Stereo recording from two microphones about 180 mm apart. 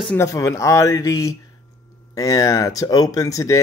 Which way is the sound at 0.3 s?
20° left (ahead or behind).